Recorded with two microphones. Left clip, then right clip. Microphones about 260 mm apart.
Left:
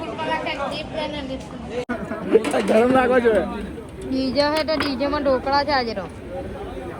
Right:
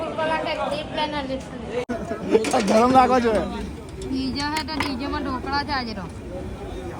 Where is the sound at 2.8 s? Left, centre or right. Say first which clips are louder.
Right 1 dB; right.